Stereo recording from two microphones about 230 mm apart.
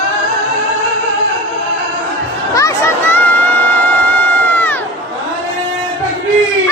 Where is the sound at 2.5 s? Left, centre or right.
Centre.